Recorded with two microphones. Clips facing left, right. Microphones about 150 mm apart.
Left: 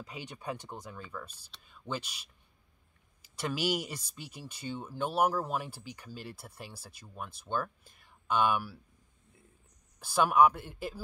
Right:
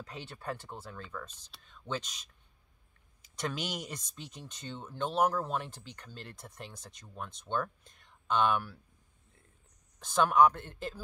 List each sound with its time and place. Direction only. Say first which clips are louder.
0.0 s speech: left 1 dB; 10° left (ahead or behind)
3.3 s speech: left 5 dB; 5° left (ahead or behind)
9.9 s speech: even; 10° left (ahead or behind)